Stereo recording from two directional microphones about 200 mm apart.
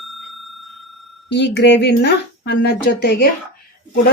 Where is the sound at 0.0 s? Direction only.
Centre (ahead or behind).